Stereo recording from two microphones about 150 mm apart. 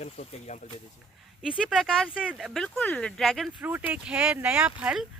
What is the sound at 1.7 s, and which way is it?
Speech, centre (ahead or behind).